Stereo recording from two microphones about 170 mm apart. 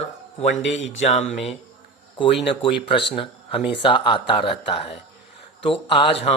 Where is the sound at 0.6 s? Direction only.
90° left.